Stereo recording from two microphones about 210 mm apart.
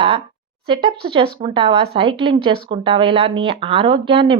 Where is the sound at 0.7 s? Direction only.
25° right (ahead or behind).